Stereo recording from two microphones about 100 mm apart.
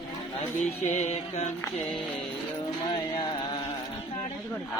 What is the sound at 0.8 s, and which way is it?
Music, 90° left.